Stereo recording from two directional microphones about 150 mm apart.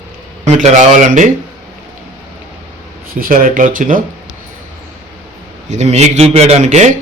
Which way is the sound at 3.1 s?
65° right (ahead or behind).